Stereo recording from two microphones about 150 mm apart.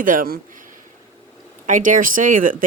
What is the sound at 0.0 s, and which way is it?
Speech, 65° right (ahead or behind).